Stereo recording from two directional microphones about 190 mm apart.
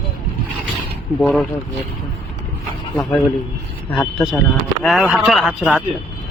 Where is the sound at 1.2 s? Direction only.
Centre (ahead or behind).